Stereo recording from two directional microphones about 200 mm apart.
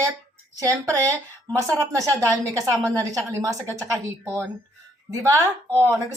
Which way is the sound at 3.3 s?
15° right (ahead or behind).